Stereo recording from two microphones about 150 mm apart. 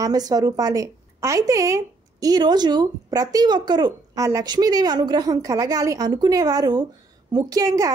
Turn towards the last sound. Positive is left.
turn(degrees=-25)  # may be behind; listen again after turning